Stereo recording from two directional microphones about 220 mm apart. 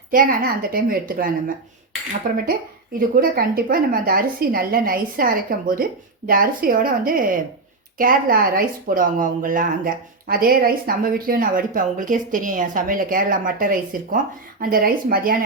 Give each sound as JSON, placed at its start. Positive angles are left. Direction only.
{"t": 0.1, "sound": "speech", "side_deg": -40}